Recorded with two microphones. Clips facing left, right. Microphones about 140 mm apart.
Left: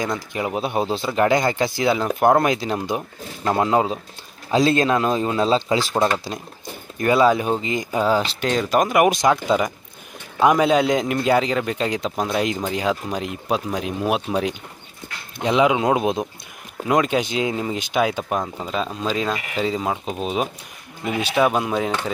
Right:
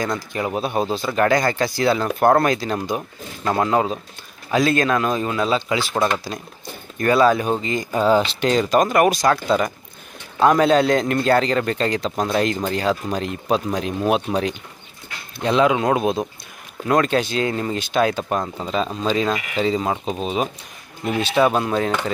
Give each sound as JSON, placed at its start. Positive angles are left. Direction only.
{"t": 0.0, "sound": "a man's voice", "side_deg": 15}
{"t": 6.0, "sound": "a man's voice", "side_deg": 20}